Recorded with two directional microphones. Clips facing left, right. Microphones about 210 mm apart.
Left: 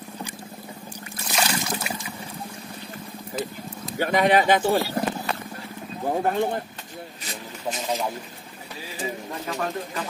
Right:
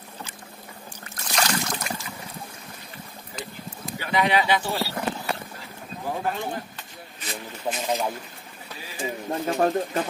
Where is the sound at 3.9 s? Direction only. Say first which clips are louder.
Left 4 dB; 45° left (ahead or behind).